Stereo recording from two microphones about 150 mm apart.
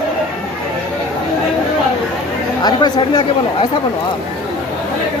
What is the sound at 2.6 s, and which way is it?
Speech, 30° left (ahead or behind).